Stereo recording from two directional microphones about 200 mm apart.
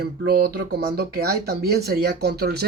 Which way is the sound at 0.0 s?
50° right (ahead or behind).